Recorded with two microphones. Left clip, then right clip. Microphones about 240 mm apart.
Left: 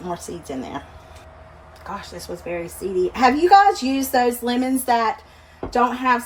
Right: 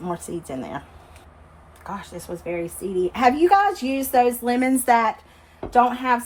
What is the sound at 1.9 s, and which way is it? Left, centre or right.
Speech, right.